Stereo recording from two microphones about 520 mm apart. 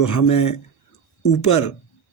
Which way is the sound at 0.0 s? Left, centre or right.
Left.